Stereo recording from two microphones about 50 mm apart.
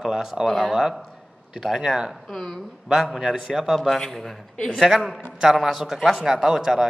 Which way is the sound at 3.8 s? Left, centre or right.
Centre.